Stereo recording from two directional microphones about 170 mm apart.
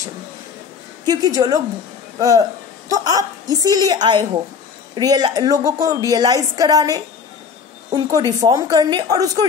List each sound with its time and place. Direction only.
1.0 s a woman's voice: 20° right (ahead or behind)